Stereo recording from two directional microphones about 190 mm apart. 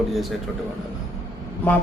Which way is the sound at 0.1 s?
Centre (ahead or behind).